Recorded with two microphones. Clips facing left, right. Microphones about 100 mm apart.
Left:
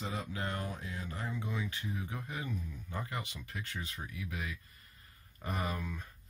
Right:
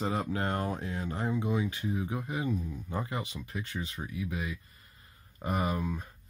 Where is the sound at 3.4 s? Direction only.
15° right (ahead or behind).